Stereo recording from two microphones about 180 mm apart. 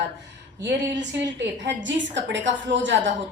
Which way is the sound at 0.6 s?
75° right (ahead or behind).